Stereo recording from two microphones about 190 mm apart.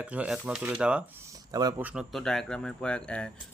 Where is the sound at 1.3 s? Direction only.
20° right (ahead or behind).